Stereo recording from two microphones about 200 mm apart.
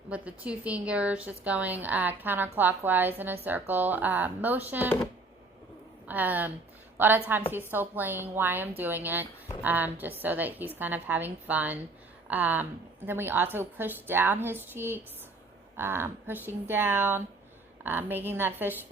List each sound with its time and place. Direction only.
0.1 s a woman's voice: 5° right (ahead or behind)
6.1 s a woman's voice: 10° right (ahead or behind)